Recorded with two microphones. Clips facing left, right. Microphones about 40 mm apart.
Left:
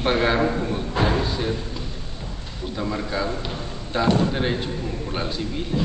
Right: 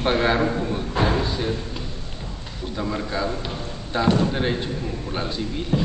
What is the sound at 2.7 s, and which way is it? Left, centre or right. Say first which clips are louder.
Speech: even; centre.